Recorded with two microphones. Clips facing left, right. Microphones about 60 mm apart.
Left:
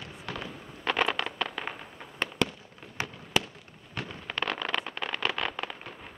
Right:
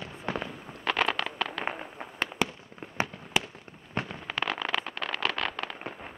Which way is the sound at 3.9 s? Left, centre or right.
Right.